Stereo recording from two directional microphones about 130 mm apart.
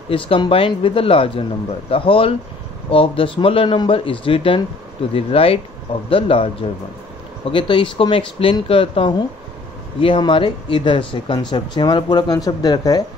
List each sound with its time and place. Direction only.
0.1 s a man's voice: 45° left (ahead or behind)
7.5 s a man's voice: 40° left (ahead or behind)